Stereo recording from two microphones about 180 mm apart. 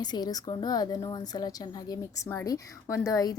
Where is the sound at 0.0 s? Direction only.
20° left (ahead or behind).